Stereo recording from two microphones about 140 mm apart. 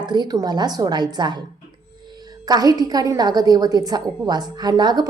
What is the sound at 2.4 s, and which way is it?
A woman's voice, 25° right (ahead or behind).